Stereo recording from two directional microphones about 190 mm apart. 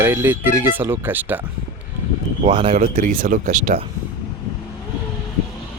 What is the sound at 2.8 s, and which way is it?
Speech, 45° right (ahead or behind).